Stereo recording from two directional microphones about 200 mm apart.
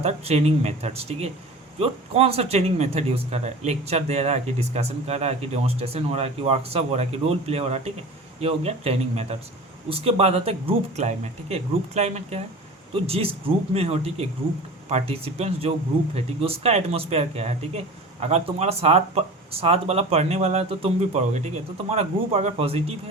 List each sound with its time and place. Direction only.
0.0 s speech: 30° right (ahead or behind)